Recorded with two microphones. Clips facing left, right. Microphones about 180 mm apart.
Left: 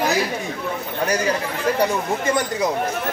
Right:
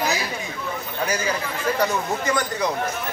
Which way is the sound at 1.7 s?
30° left (ahead or behind).